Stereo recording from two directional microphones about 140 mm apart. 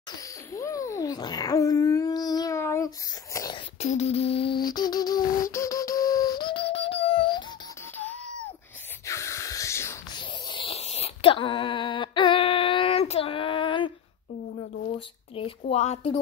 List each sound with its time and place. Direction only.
0.5 s babbling: 20° left (ahead or behind)
3.8 s beatboxing: 50° left (ahead or behind)
4.6 s music: 30° left (ahead or behind)
9.0 s gasp: 20° left (ahead or behind)
10.1 s a sound: 35° left (ahead or behind)
14.9 s speech: 40° left (ahead or behind)
15.7 s beatboxing: 50° left (ahead or behind)